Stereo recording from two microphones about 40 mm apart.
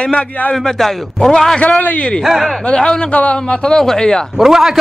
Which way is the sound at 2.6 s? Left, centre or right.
Left.